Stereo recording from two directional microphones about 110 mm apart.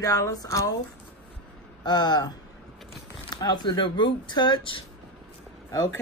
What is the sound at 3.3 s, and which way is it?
Speech, 40° left (ahead or behind).